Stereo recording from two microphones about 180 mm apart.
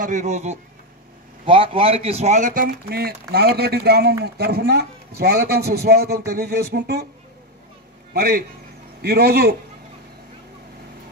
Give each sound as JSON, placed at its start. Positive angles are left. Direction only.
{"t": 0.0, "sound": "a man's voice", "side_deg": -45}
{"t": 8.1, "sound": "a man's voice", "side_deg": -60}